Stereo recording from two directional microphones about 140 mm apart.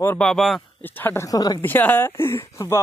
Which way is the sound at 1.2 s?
25° left (ahead or behind).